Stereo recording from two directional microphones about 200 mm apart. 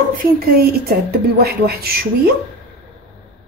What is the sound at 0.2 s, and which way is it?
Speech, 50° right (ahead or behind).